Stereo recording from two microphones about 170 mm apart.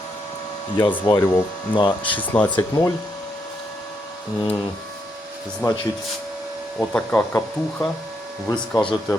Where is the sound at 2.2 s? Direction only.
10° left (ahead or behind).